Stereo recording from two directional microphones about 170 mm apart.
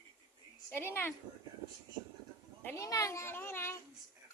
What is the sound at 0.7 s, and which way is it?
Speech, 15° left (ahead or behind).